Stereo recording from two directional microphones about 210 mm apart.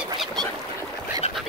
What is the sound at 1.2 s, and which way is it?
Duck, 30° left (ahead or behind).